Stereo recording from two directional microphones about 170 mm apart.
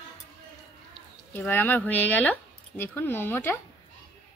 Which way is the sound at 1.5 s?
10° left (ahead or behind).